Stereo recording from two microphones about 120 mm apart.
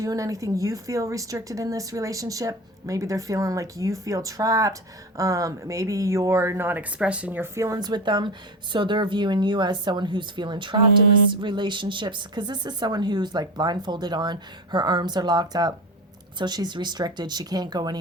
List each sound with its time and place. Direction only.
0.0 s speech: 30° right (ahead or behind)